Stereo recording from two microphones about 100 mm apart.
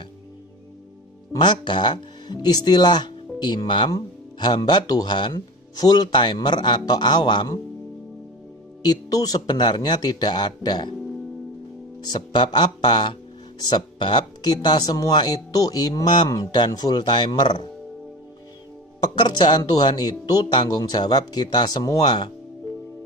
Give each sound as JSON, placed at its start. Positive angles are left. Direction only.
{"t": 1.4, "sound": "speech", "side_deg": 50}
{"t": 3.9, "sound": "speech", "side_deg": 40}
{"t": 8.8, "sound": "speech", "side_deg": 40}
{"t": 12.3, "sound": "speech", "side_deg": 50}
{"t": 19.1, "sound": "speech", "side_deg": 45}